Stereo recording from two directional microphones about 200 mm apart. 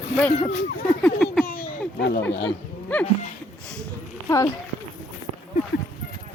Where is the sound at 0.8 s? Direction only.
5° left (ahead or behind).